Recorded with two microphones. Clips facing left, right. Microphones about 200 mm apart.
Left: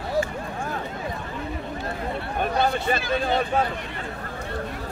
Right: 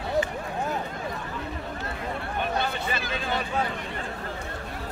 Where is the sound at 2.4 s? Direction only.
45° left (ahead or behind).